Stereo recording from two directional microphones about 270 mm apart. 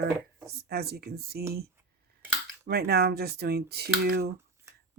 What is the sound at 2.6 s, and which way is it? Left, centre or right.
Speech, right.